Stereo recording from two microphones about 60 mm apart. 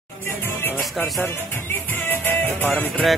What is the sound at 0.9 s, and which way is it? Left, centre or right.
Speech, centre.